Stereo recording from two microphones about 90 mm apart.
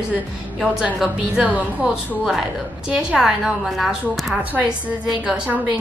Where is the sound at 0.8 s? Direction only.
15° right (ahead or behind).